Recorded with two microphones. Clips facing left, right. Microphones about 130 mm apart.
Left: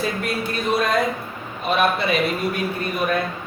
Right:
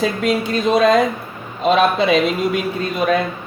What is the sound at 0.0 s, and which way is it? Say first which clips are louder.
A man's voice: right 6 dB; 90° right.